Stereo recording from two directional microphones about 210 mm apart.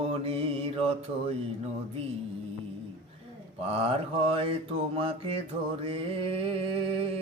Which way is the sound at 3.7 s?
25° right (ahead or behind).